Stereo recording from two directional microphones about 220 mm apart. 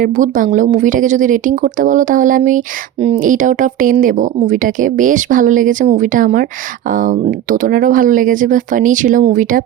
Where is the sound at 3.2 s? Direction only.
35° right (ahead or behind).